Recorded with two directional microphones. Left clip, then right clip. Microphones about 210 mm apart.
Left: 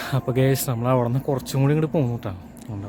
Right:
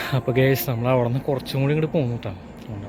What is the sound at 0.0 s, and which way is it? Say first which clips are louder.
Speech: right 2 dB; 10° left (ahead or behind).